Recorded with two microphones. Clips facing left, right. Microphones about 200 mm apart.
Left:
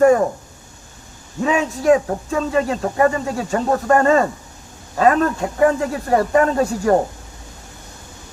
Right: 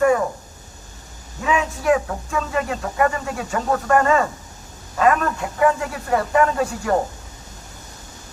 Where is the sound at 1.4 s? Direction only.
35° left (ahead or behind).